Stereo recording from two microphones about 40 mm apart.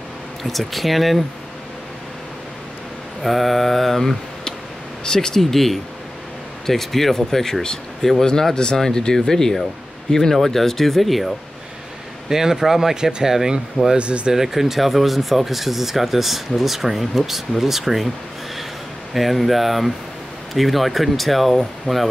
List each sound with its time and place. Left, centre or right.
0.4 s speech: centre
3.2 s speech: centre
5.0 s speech: centre
5.4 s speech: centre
12.3 s speech: centre
13.9 s speech: right
14.3 s speech: centre
19.1 s speech: centre